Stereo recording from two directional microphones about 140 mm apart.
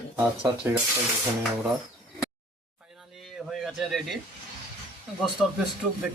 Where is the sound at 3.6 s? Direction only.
Centre (ahead or behind).